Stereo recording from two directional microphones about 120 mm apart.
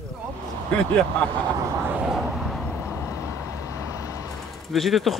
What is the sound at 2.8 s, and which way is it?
Vehicle, 25° left (ahead or behind).